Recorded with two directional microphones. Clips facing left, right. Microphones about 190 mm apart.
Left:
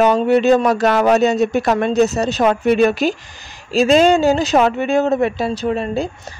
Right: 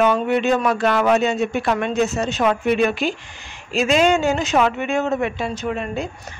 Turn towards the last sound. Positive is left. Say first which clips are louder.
# left 5 dB
turn(degrees=35)  # may be behind; listen again after turning